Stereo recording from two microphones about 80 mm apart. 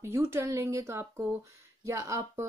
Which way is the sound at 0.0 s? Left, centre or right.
Right.